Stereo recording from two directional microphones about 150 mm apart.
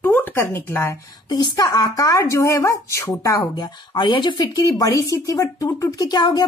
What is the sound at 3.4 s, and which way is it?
A woman's voice, 30° left (ahead or behind).